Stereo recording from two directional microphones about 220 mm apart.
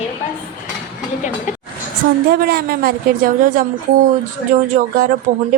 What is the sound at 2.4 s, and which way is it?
A woman's voice, 45° right (ahead or behind).